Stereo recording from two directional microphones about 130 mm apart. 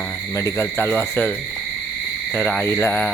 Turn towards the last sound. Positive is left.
turn(degrees=15)  # may be behind; listen again after turning